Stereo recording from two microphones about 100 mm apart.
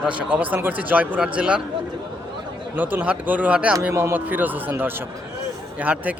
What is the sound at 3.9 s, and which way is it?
Speech, 20° right (ahead or behind).